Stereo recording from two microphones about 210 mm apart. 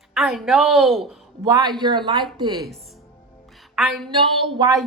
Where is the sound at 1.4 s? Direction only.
20° right (ahead or behind).